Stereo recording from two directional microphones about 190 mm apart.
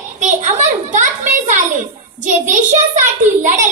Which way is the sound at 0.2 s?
40° right (ahead or behind).